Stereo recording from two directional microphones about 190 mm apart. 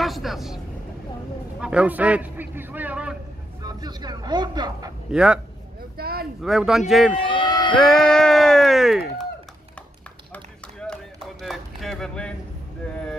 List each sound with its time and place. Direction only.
0.0 s vehicle: centre (ahead or behind)
1.6 s a sound: 5° right (ahead or behind)
3.6 s speech: 20° right (ahead or behind)
5.1 s speech: 5° right (ahead or behind)
5.9 s a sound: 55° right (ahead or behind)
6.4 s speech: centre (ahead or behind)
7.2 s run: 25° left (ahead or behind)
7.7 s speech: 5° left (ahead or behind)
10.3 s run: 5° left (ahead or behind)
11.4 s a sound: centre (ahead or behind)